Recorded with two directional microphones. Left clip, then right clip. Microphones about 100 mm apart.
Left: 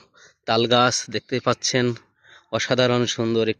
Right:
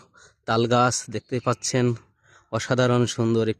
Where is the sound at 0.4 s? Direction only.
25° right (ahead or behind).